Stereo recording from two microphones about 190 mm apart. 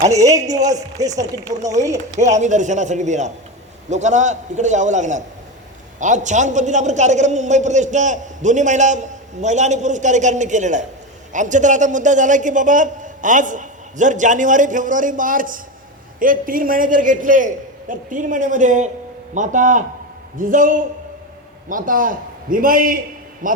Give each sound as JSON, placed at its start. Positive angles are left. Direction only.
{"t": 0.0, "sound": "a man's voice", "side_deg": -15}
{"t": 2.1, "sound": "a man's voice", "side_deg": -40}